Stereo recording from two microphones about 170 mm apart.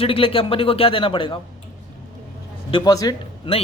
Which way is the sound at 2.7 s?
20° left (ahead or behind).